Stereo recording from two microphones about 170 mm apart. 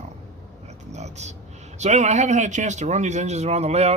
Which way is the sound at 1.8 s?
45° right (ahead or behind).